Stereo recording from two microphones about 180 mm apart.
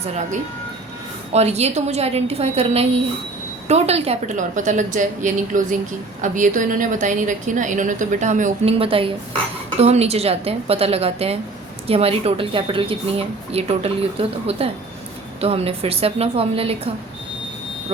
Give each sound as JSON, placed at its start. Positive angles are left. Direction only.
{"t": 0.0, "sound": "a woman's voice", "side_deg": -40}
{"t": 8.8, "sound": "a woman's voice", "side_deg": -30}